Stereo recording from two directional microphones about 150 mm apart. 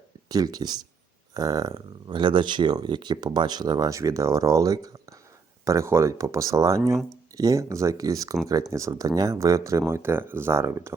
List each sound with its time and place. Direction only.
0.3 s speech: 25° right (ahead or behind)